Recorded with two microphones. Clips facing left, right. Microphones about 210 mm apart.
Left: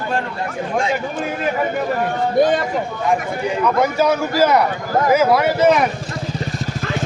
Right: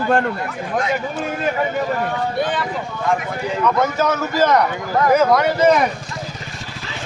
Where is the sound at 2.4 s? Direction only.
45° left (ahead or behind).